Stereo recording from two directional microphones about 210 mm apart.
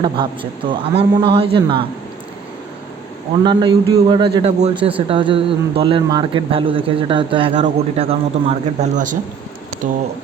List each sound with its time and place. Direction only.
0.0 s speech: 25° right (ahead or behind)
3.4 s speech: 20° right (ahead or behind); by 10.0 s 40° right (ahead or behind)